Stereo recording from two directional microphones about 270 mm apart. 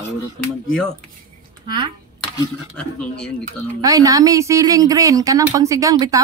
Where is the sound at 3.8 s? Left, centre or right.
Centre.